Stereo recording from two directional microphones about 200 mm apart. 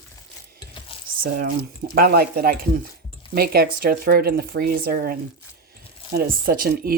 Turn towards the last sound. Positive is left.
turn(degrees=-50)  # may be behind; listen again after turning